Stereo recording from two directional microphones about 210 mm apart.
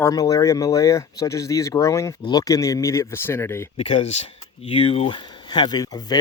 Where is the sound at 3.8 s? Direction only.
25° left (ahead or behind).